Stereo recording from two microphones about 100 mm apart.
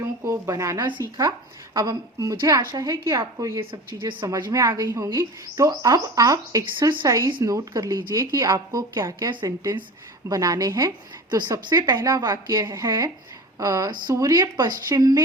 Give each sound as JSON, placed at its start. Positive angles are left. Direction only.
{"t": 0.0, "sound": "a sound", "side_deg": -30}
{"t": 1.0, "sound": "a woman's voice", "side_deg": -30}
{"t": 3.6, "sound": "speech", "side_deg": -60}
{"t": 4.5, "sound": "a woman's voice", "side_deg": -35}
{"t": 9.3, "sound": "speech", "side_deg": -45}
{"t": 10.2, "sound": "a woman's voice", "side_deg": -35}
{"t": 12.6, "sound": "a woman's voice", "side_deg": -30}